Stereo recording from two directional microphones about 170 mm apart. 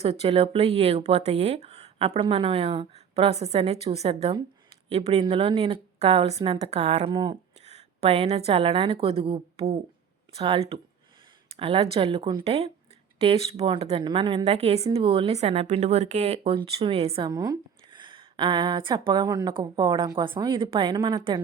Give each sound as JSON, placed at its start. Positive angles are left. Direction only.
{"t": 0.0, "sound": "speech", "side_deg": -35}
{"t": 7.1, "sound": "speech", "side_deg": -25}
{"t": 7.6, "sound": "a woman's voice", "side_deg": -40}
{"t": 17.2, "sound": "speech", "side_deg": -20}